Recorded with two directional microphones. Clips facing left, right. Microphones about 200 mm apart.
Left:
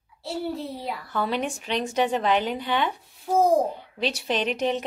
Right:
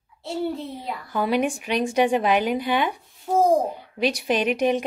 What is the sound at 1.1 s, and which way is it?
A woman's voice, 15° right (ahead or behind).